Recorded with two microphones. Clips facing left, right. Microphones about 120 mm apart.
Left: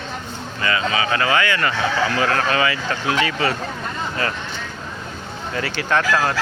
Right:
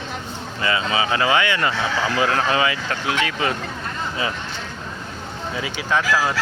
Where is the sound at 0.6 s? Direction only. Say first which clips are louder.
Even; 20° right (ahead or behind).